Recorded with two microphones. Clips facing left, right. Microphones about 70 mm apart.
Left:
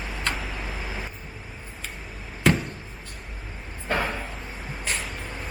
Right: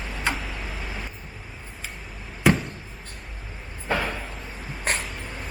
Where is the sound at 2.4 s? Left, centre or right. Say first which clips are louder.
Right 1 dB; centre.